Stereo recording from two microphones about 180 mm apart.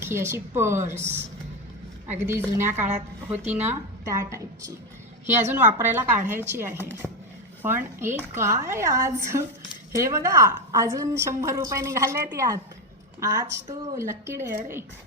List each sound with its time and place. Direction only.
0.0 s a woman's voice: 15° right (ahead or behind)